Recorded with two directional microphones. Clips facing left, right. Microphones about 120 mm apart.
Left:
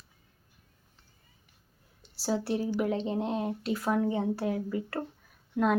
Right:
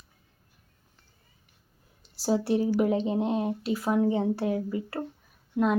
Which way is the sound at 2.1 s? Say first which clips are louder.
Right 5 dB; 15° right (ahead or behind).